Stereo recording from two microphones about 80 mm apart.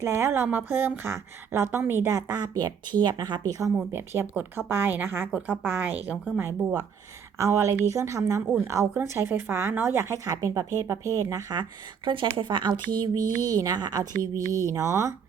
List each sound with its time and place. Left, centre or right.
0.0 s speech: right
2.0 s speech: right
3.9 s speech: right
7.3 s speech: right
12.0 s speech: right
13.4 s speech: right